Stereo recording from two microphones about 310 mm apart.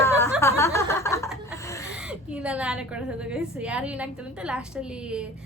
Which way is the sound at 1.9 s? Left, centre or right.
Centre.